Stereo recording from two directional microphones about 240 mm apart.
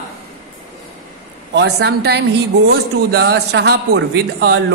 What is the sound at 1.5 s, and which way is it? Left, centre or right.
Speech, right.